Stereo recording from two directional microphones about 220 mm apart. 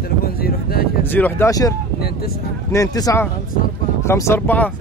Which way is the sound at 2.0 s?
45° left (ahead or behind).